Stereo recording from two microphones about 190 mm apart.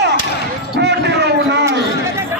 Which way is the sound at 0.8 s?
60° right (ahead or behind).